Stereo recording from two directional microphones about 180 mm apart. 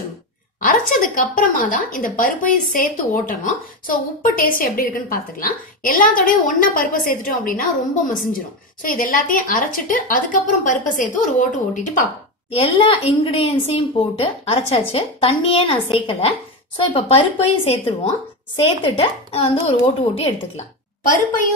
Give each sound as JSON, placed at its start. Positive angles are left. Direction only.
{"t": 0.6, "sound": "a woman's voice", "side_deg": 50}
{"t": 8.8, "sound": "a woman's voice", "side_deg": 50}
{"t": 12.5, "sound": "a woman's voice", "side_deg": 35}
{"t": 21.0, "sound": "a woman's voice", "side_deg": 50}